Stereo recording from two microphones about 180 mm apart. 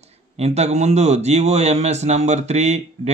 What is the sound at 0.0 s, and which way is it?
A man's voice, 35° right (ahead or behind).